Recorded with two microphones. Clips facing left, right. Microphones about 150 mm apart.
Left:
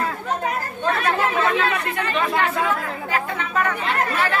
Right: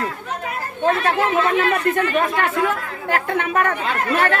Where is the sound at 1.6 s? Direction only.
45° right (ahead or behind).